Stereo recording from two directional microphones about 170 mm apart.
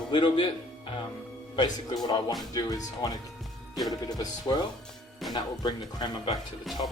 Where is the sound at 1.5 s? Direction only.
25° left (ahead or behind).